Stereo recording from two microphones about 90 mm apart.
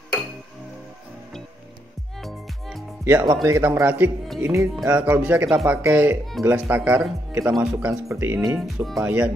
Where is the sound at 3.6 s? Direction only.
20° right (ahead or behind).